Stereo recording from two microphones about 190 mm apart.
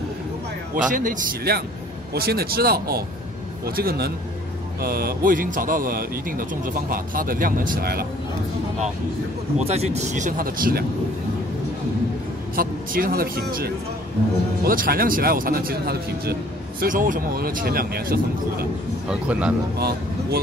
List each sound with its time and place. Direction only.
0.7 s a man's voice: 45° right (ahead or behind)
9.6 s speech: 35° right (ahead or behind); by 10.9 s 50° right (ahead or behind)
12.5 s a man's voice: 50° right (ahead or behind)
16.8 s a man's voice: 45° right (ahead or behind)
19.0 s a man's voice: 5° right (ahead or behind)
19.8 s speech: 55° right (ahead or behind)